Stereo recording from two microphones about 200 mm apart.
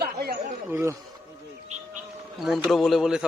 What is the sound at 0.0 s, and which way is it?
Chatter, 50° right (ahead or behind).